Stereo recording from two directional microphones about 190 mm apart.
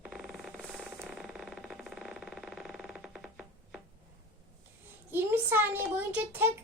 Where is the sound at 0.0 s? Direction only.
Centre (ahead or behind).